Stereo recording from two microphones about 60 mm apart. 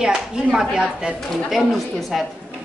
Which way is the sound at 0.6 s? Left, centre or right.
Centre.